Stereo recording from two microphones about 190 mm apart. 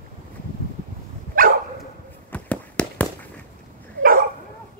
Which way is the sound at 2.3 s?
5° left (ahead or behind).